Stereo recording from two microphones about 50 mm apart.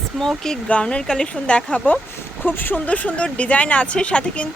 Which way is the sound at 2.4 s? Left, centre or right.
Left.